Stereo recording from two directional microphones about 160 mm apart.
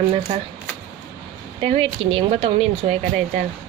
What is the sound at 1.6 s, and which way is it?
Speech, 35° right (ahead or behind).